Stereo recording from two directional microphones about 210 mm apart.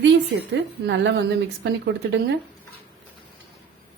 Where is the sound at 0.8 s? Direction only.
55° right (ahead or behind).